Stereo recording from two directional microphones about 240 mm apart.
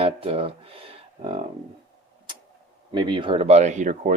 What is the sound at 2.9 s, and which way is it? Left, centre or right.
Speech, centre.